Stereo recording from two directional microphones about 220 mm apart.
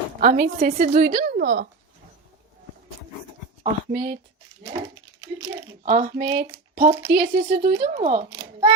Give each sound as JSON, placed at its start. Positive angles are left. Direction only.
{"t": 0.2, "sound": "a woman's voice", "side_deg": -40}
{"t": 3.6, "sound": "a woman's voice", "side_deg": -40}
{"t": 5.8, "sound": "a woman's voice", "side_deg": -35}
{"t": 8.3, "sound": "a sound", "side_deg": -20}